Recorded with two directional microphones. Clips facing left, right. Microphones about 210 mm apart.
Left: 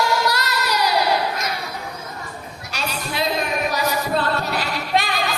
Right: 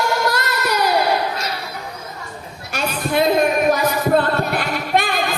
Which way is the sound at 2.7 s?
50° right (ahead or behind).